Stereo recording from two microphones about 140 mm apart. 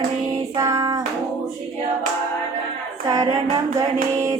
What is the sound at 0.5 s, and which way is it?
Child singing, 25° right (ahead or behind).